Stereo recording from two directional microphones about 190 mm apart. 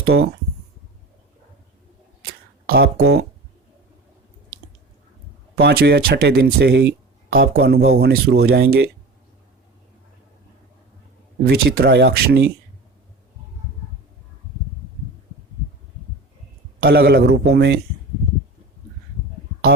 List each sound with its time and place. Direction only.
0.0 s speech: 90° right
2.6 s speech: 55° right (ahead or behind)
5.5 s speech: 60° right (ahead or behind)
11.4 s speech: 55° right (ahead or behind)
16.8 s speech: 60° right (ahead or behind)